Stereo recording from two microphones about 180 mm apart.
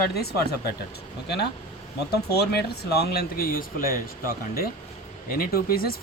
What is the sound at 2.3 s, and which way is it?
Speech, 60° left (ahead or behind).